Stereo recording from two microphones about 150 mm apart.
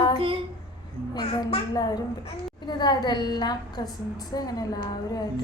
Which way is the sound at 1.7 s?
25° left (ahead or behind).